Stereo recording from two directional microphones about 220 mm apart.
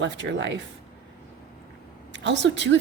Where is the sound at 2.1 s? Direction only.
55° right (ahead or behind).